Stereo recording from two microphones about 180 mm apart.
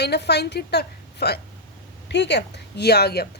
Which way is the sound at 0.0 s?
65° left (ahead or behind).